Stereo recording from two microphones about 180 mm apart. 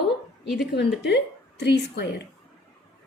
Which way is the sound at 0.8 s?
70° left (ahead or behind).